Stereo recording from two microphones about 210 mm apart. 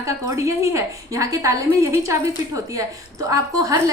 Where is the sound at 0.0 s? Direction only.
15° right (ahead or behind).